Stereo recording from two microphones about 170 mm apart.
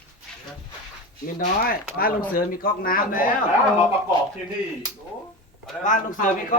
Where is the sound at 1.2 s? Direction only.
55° left (ahead or behind).